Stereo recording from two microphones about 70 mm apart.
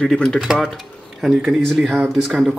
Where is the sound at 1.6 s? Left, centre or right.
Centre.